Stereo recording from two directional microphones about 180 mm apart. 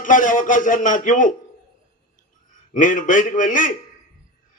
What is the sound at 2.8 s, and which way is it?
Speech, 45° left (ahead or behind).